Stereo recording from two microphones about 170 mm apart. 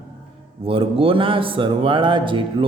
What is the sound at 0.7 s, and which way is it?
A man's voice, 30° right (ahead or behind).